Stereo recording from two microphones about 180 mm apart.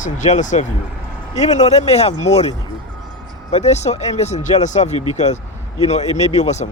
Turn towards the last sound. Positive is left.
turn(degrees=40)  # may be behind; listen again after turning